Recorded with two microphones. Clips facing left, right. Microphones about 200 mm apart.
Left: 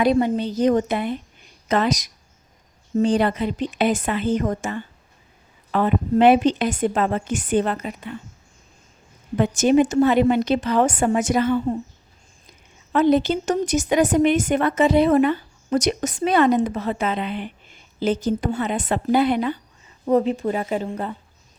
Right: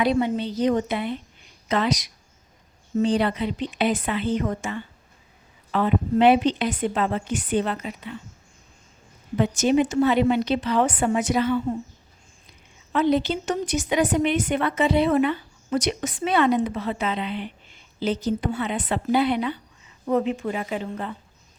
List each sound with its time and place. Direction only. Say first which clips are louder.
0.0 s a woman's voice: left 3 dB; 45° left (ahead or behind)
9.4 s a woman's voice: left 3 dB; 50° left (ahead or behind)